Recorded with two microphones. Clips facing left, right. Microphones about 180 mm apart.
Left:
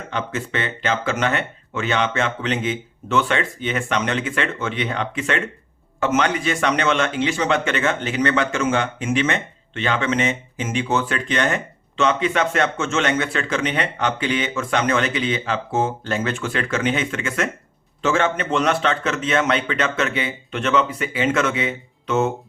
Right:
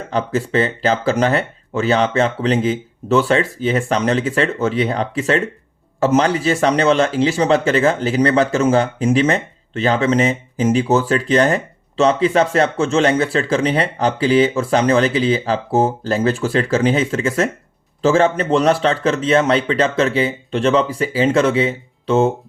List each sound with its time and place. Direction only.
0.1 s a man's voice: 35° right (ahead or behind)